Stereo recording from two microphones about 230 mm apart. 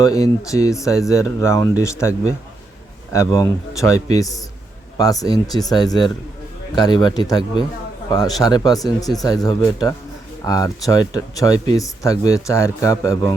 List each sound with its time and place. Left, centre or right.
0.0 s speech: centre